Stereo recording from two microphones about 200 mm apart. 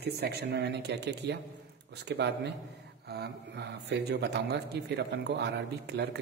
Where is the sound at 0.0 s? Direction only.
55° right (ahead or behind).